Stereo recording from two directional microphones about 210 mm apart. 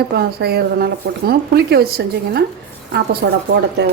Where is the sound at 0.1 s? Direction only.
50° right (ahead or behind).